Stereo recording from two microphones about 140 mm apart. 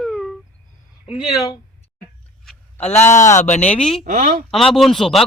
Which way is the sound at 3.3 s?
60° left (ahead or behind).